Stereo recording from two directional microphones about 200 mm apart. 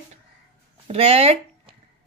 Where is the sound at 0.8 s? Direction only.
30° right (ahead or behind).